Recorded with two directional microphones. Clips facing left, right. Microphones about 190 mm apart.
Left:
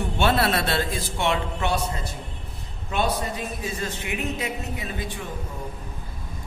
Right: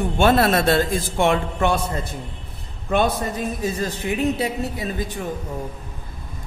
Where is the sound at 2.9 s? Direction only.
50° right (ahead or behind).